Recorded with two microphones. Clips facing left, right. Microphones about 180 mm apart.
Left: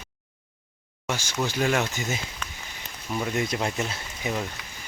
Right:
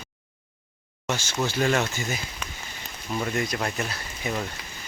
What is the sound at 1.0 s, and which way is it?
Speech, 10° left (ahead or behind).